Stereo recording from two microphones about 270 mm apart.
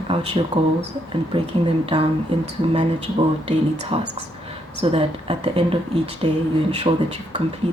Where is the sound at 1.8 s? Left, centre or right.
Right.